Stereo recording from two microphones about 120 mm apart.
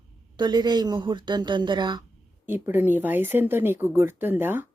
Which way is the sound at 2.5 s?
15° right (ahead or behind).